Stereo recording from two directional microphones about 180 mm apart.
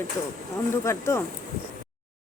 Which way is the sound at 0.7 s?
15° left (ahead or behind).